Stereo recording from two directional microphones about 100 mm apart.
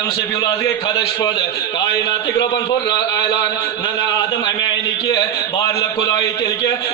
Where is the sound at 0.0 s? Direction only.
35° left (ahead or behind).